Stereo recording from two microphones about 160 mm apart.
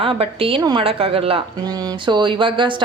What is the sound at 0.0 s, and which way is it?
Speech, 35° right (ahead or behind).